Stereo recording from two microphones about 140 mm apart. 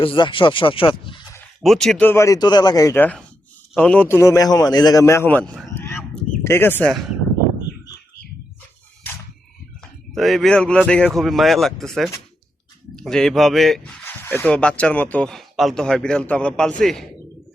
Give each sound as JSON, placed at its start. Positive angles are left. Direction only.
{"t": 0.0, "sound": "speech", "side_deg": 35}
{"t": 1.6, "sound": "speech", "side_deg": 0}
{"t": 2.0, "sound": "a man's voice", "side_deg": 20}
{"t": 4.2, "sound": "a man's voice", "side_deg": 25}
{"t": 5.7, "sound": "a sound", "side_deg": 15}
{"t": 6.4, "sound": "speech", "side_deg": 15}
{"t": 9.8, "sound": "speech", "side_deg": 0}
{"t": 14.0, "sound": "speech", "side_deg": 15}